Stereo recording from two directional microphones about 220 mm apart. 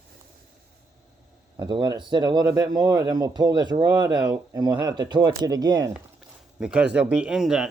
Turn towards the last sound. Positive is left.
turn(degrees=-5)  # may be behind; listen again after turning